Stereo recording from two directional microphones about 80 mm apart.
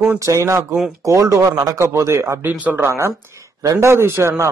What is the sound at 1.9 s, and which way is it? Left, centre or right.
Speech, right.